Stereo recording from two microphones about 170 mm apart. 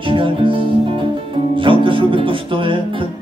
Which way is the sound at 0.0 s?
30° right (ahead or behind).